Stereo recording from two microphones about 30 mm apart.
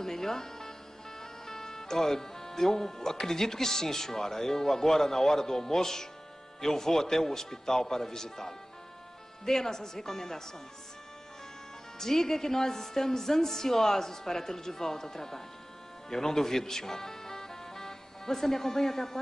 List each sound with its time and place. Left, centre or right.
0.0 s music: centre
1.2 s a woman's voice: centre
12.0 s a woman's voice: centre